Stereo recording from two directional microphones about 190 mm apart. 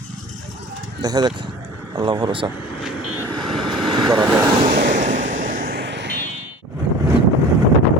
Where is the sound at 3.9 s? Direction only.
25° right (ahead or behind).